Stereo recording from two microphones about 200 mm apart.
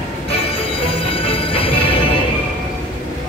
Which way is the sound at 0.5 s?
25° left (ahead or behind).